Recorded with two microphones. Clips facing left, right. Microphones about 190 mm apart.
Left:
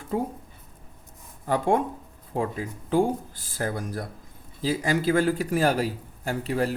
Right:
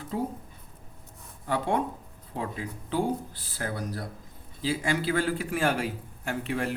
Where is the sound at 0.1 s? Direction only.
50° left (ahead or behind).